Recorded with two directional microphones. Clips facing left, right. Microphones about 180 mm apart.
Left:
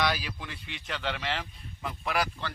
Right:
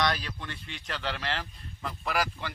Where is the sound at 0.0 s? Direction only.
5° left (ahead or behind).